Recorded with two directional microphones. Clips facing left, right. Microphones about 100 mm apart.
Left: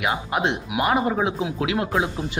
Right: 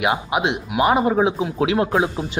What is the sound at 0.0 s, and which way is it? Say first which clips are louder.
A man's voice: right 3 dB; 15° right (ahead or behind).